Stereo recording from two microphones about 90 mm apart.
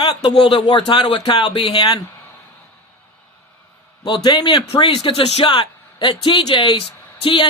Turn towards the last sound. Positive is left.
turn(degrees=60)  # may be behind; listen again after turning